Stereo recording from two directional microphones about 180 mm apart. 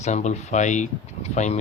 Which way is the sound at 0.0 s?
40° left (ahead or behind).